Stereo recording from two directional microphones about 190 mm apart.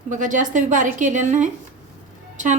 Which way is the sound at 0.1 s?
45° right (ahead or behind).